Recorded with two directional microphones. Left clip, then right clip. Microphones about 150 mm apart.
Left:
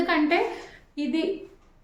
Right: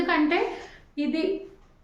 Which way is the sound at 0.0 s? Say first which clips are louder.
Left 1 dB; 25° left (ahead or behind).